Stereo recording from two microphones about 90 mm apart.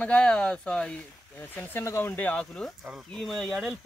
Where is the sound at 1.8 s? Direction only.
30° left (ahead or behind); by 3.6 s 5° left (ahead or behind).